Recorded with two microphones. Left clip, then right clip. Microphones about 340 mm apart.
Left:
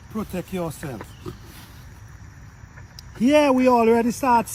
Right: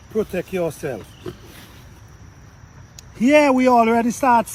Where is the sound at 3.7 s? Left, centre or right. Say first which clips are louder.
Right 2 dB; right.